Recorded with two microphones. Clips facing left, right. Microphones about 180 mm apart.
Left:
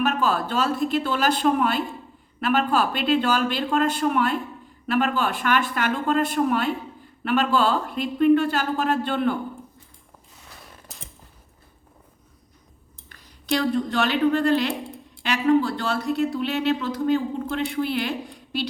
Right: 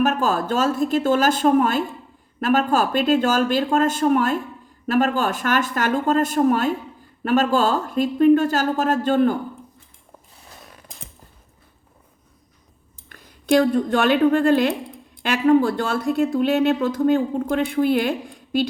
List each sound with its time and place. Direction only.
0.0 s speech: 45° right (ahead or behind)
13.1 s a woman's voice: 50° right (ahead or behind)